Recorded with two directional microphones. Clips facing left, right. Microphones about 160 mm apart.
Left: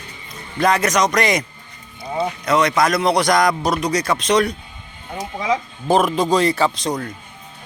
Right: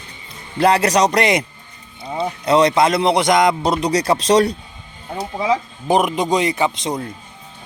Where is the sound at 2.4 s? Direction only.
30° right (ahead or behind).